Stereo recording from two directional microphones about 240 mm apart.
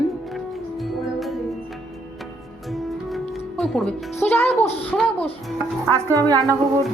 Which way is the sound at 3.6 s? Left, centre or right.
Centre.